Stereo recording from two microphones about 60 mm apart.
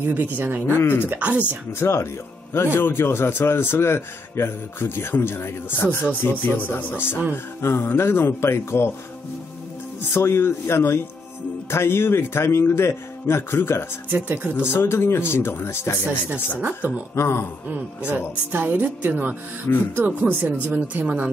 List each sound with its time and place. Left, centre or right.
0.0 s speech: right
0.7 s a man's voice: left
1.0 s speech: right
1.8 s a man's voice: left
10.1 s a man's voice: left
14.1 s speech: right
14.6 s a man's voice: left
17.6 s speech: right
19.7 s a man's voice: left
20.0 s speech: right